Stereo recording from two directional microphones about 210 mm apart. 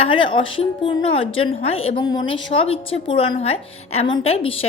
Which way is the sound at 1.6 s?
25° left (ahead or behind).